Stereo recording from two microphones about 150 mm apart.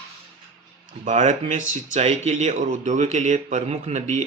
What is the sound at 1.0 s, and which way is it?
Speech, 55° right (ahead or behind).